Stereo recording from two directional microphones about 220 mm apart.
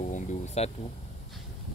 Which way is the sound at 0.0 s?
35° left (ahead or behind).